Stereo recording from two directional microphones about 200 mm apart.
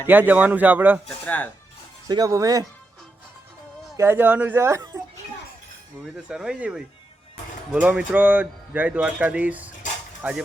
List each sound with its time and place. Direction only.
0.1 s speech: 10° right (ahead or behind)
1.0 s speech: 5° left (ahead or behind)
2.0 s speech: 20° right (ahead or behind)
3.9 s speech: 10° right (ahead or behind)
6.1 s speech: 5° right (ahead or behind)